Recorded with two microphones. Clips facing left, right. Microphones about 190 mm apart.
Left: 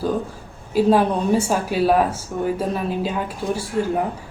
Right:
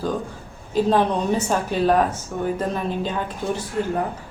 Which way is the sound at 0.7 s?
10° left (ahead or behind).